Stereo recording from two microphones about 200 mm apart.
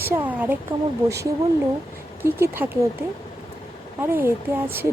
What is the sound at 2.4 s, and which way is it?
Speech, 10° right (ahead or behind).